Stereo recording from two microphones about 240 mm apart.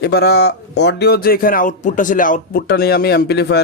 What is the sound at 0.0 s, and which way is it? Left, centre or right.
A man's voice, left.